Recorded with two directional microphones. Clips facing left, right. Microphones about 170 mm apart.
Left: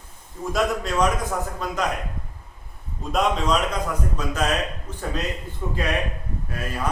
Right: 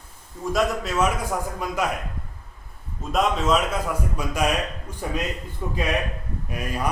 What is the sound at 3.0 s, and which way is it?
A man's voice, centre (ahead or behind).